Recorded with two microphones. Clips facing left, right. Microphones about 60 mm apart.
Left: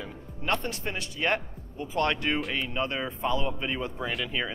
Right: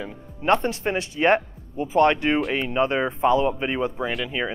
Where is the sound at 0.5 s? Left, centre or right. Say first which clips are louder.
Right 9 dB; right.